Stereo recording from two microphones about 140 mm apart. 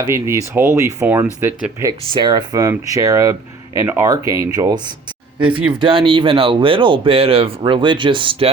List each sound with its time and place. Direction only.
0.0 s speech: 20° right (ahead or behind)
1.9 s speech: 30° right (ahead or behind)
5.5 s speech: 40° right (ahead or behind)